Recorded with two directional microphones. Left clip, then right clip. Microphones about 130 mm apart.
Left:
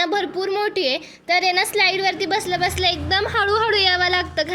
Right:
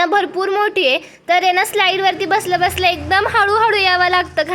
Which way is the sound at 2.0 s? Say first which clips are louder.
Right 5 dB; 30° left (ahead or behind).